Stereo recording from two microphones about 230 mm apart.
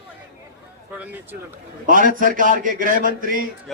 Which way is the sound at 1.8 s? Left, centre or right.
Right.